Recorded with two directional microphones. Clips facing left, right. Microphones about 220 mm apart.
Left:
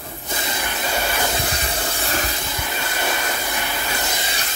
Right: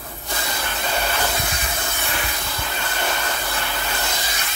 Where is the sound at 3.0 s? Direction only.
15° left (ahead or behind).